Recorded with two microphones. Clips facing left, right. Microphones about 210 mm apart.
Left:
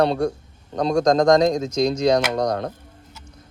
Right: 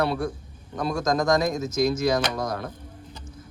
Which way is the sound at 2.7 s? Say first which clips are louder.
Right 3 dB; 10° left (ahead or behind).